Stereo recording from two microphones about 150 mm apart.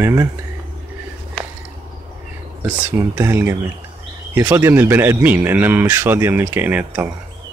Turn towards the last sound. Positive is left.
turn(degrees=-10)  # may be behind; listen again after turning